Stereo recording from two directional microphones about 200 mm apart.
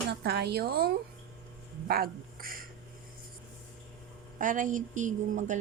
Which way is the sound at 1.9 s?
50° right (ahead or behind).